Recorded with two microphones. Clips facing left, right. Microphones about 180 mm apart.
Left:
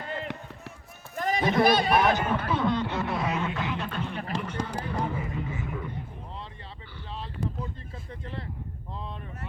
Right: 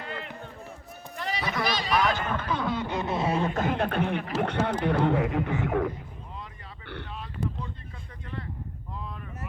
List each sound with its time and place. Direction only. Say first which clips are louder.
1.1 s a sound: left 6 dB; 45° left (ahead or behind)
1.6 s speech: left 5 dB; 55° left (ahead or behind)
2.0 s speech: left 3 dB; 20° left (ahead or behind); by 2.8 s centre (ahead or behind)
2.8 s speech: right 1 dB; 15° right (ahead or behind)
3.5 s speech: right 5 dB; 50° right (ahead or behind)
4.4 s a man's voice: right 7 dB; 70° right (ahead or behind)